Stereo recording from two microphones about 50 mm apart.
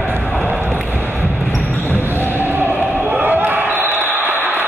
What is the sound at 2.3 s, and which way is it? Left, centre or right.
Basketball bounce, right.